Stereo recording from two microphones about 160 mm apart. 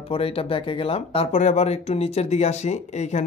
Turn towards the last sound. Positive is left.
turn(degrees=45)  # may be behind; listen again after turning